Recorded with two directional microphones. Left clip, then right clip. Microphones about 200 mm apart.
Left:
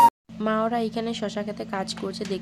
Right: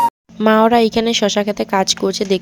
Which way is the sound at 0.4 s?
45° right (ahead or behind).